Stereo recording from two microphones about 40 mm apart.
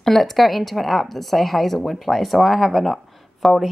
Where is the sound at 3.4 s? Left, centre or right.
Centre.